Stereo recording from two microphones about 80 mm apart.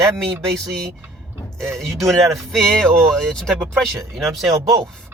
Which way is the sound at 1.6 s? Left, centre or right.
Centre.